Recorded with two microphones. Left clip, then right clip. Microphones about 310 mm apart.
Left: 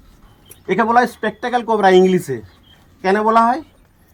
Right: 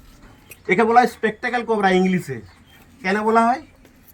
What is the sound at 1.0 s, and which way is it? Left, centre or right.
Speech, left.